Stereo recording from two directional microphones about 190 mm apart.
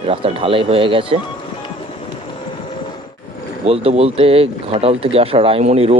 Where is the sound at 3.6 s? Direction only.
30° right (ahead or behind).